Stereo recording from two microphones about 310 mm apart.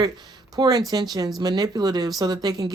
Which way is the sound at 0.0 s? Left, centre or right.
Centre.